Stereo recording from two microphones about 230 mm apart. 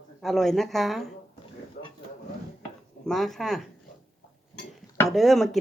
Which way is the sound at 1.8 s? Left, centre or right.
Left.